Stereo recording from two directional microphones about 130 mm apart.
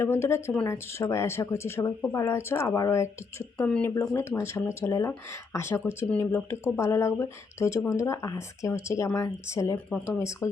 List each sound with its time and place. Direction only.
0.0 s speech: 20° left (ahead or behind)
3.6 s speech: 10° left (ahead or behind)